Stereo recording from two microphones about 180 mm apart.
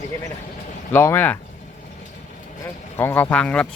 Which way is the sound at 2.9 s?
10° left (ahead or behind).